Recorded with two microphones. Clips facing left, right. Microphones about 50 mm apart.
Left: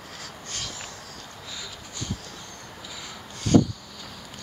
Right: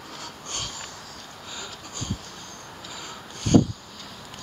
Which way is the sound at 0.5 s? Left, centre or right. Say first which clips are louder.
Right 2 dB; right.